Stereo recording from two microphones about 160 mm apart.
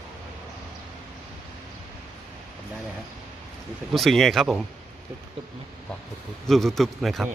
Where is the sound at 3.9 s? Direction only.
Centre (ahead or behind).